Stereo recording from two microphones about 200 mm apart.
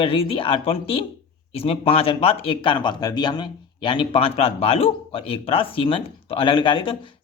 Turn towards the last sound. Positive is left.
turn(degrees=25)  # may be behind; listen again after turning